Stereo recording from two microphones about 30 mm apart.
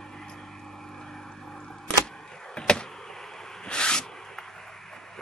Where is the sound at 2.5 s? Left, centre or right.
Left.